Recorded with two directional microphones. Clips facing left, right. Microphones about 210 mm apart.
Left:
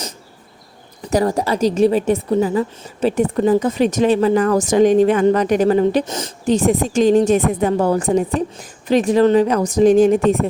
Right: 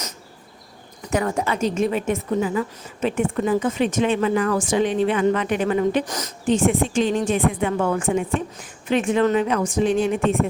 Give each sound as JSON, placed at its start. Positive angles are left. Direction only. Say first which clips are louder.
{"t": 1.1, "sound": "a woman's voice", "louder": "left 5 dB", "side_deg": 35}